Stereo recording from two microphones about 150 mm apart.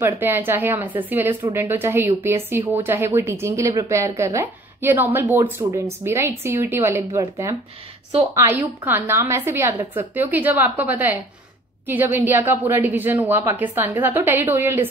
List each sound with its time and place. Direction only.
0.0 s speech: 15° right (ahead or behind)
8.1 s a woman's voice: 40° right (ahead or behind)
8.5 s speech: 15° right (ahead or behind)